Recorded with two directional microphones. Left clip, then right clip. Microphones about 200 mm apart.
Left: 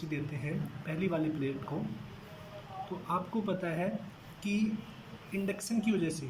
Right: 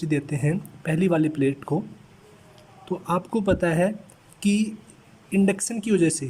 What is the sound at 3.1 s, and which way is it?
Speech, 50° right (ahead or behind).